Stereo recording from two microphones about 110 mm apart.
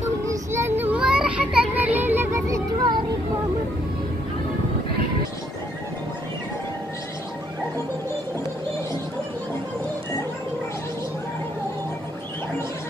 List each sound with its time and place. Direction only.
0.3 s child singing: 25° right (ahead or behind)